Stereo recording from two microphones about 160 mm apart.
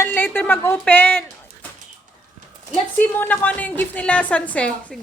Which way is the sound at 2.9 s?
10° left (ahead or behind).